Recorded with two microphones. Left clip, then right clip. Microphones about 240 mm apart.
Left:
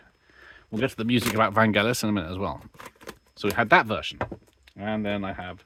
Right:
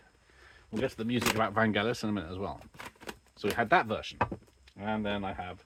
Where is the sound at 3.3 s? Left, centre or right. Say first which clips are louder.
Left 7 dB; left.